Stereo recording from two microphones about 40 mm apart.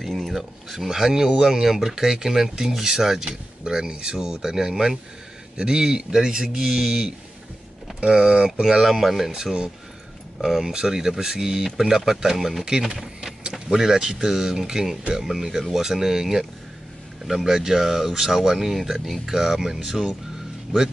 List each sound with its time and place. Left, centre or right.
0.0 s speech: centre
3.3 s speech: centre
8.5 s speech: centre